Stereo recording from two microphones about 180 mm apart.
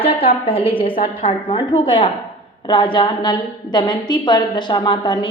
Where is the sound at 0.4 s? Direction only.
30° left (ahead or behind).